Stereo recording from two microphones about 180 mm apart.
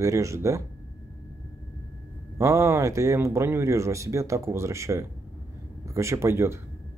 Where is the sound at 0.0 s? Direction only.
15° right (ahead or behind).